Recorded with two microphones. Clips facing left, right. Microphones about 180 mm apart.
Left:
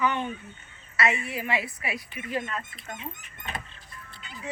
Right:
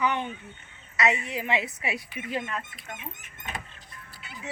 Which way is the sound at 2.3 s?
15° right (ahead or behind).